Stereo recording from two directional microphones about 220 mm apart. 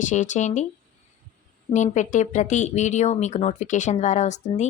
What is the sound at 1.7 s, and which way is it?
Speech, 35° left (ahead or behind).